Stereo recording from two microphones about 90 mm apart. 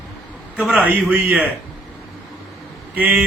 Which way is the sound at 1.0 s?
20° right (ahead or behind).